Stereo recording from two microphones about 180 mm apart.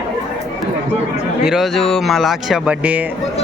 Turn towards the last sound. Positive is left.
turn(degrees=-10)  # may be behind; listen again after turning